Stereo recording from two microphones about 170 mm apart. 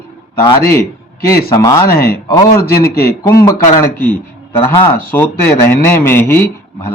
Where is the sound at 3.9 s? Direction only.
10° left (ahead or behind).